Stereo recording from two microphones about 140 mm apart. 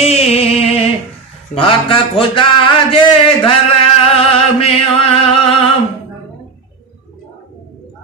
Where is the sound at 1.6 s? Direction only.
40° left (ahead or behind).